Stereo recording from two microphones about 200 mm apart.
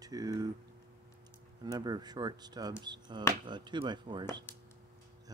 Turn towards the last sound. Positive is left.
turn(degrees=-25)  # may be behind; listen again after turning